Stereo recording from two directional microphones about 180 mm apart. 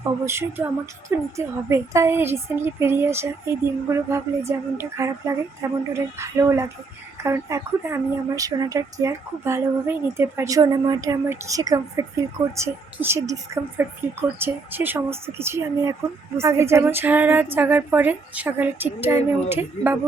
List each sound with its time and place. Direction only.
0.0 s speech: 15° right (ahead or behind)